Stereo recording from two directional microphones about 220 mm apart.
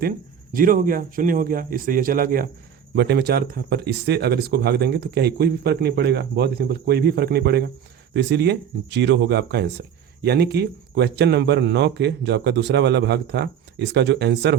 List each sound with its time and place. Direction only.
0.5 s speech: 40° right (ahead or behind)